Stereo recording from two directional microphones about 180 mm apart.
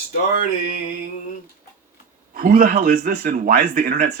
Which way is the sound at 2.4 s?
50° right (ahead or behind).